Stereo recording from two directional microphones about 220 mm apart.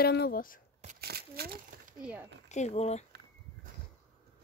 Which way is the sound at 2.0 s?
5° right (ahead or behind).